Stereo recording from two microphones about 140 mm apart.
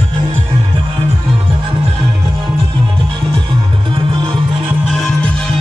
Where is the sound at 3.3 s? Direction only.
40° right (ahead or behind).